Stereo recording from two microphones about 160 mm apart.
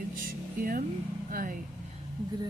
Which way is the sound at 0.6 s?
60° right (ahead or behind).